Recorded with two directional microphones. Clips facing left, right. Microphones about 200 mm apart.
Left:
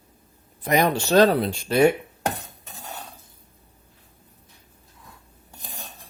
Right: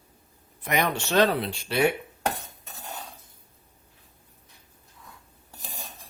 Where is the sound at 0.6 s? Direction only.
35° left (ahead or behind).